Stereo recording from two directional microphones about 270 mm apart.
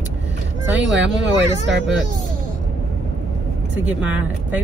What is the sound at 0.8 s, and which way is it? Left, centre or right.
Speech, right.